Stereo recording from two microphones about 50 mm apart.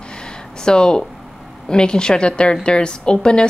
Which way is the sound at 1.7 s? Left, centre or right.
Centre.